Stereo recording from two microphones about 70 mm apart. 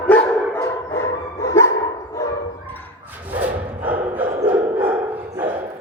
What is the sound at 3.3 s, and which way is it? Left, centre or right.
Bow-wow, right.